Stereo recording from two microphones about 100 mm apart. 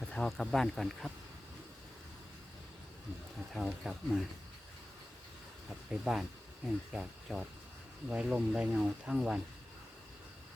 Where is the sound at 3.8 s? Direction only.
5° right (ahead or behind).